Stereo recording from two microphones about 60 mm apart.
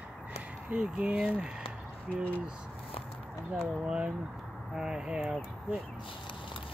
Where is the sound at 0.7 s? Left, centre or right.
Centre.